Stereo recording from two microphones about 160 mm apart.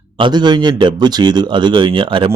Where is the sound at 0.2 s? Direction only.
30° right (ahead or behind).